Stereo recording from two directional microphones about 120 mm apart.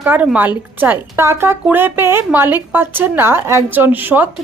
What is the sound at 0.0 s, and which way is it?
A woman's voice, 15° right (ahead or behind).